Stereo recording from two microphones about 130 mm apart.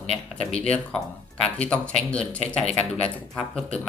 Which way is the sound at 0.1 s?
50° left (ahead or behind).